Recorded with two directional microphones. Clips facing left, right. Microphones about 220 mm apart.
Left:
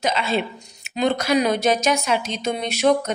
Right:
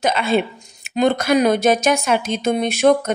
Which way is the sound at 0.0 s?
55° right (ahead or behind).